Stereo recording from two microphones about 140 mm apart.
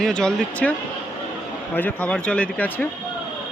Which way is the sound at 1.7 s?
10° left (ahead or behind).